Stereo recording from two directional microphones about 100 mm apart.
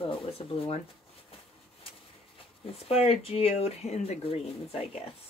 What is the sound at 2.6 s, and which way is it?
Speech, 85° left.